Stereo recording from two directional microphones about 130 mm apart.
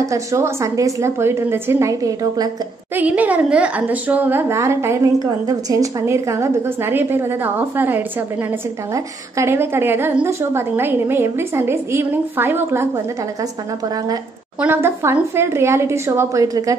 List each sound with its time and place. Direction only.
0.0 s a woman's voice: 25° right (ahead or behind)
3.0 s a woman's voice: 10° right (ahead or behind)
14.6 s a woman's voice: 20° right (ahead or behind)